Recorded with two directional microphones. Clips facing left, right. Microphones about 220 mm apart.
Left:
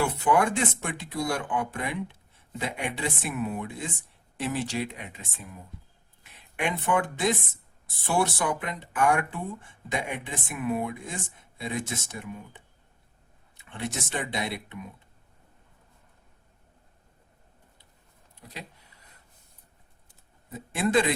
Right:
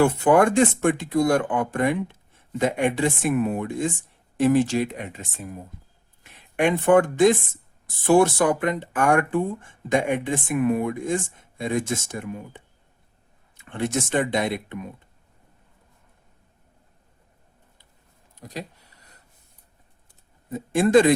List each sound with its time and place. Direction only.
0.0 s speech: 50° right (ahead or behind)
6.6 s speech: 50° right (ahead or behind)
13.7 s speech: 50° right (ahead or behind)
18.3 s speech: 40° right (ahead or behind)
20.5 s speech: 45° right (ahead or behind)